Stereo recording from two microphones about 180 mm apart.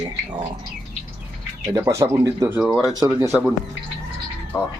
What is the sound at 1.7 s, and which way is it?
Speech, 15° right (ahead or behind).